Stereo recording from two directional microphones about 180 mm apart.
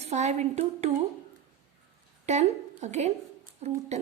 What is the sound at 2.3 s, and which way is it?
A woman's voice, 40° right (ahead or behind).